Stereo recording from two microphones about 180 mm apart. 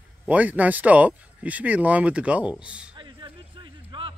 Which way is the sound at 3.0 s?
25° right (ahead or behind).